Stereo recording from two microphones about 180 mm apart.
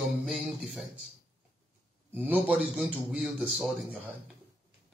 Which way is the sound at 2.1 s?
10° right (ahead or behind).